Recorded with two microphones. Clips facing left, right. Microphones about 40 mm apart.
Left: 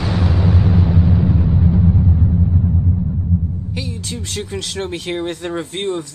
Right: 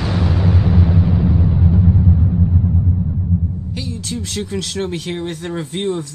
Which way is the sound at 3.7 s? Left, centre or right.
Centre.